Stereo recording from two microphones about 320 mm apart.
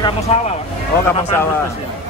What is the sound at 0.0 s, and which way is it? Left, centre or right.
Speech, centre.